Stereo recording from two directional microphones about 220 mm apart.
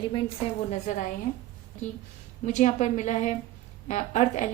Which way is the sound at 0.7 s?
35° left (ahead or behind).